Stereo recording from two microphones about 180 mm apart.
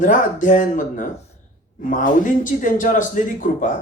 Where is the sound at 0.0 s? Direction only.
45° left (ahead or behind).